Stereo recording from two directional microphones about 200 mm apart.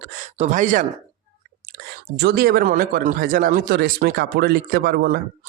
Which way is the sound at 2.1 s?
55° right (ahead or behind).